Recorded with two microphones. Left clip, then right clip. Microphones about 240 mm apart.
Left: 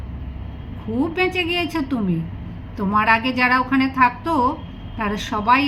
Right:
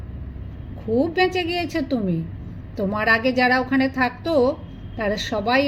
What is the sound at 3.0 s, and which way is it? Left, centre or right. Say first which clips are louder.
A woman's voice: left 1 dB; right.